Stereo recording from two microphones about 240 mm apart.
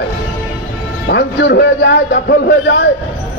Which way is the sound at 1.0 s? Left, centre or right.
Left.